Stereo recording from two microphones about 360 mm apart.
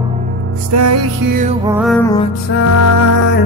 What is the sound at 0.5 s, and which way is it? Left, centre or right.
Music, right.